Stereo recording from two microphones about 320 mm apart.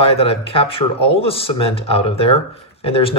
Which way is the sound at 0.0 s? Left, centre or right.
Centre.